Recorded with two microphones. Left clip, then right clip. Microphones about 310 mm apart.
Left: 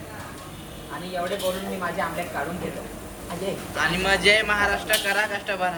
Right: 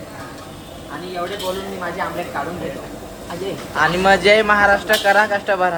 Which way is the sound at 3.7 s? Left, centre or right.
Right.